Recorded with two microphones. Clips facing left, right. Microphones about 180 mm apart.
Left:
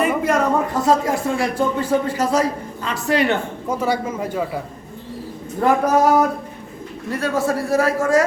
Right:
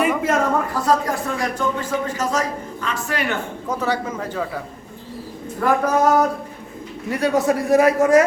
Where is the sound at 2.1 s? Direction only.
10° left (ahead or behind).